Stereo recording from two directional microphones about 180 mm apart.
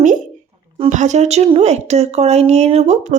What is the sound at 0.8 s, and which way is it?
Speech, 40° right (ahead or behind).